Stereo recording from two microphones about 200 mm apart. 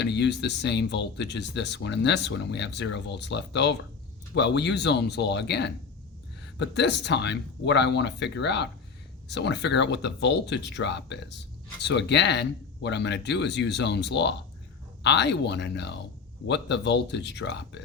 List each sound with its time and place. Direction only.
0.0 s speech: 60° left (ahead or behind)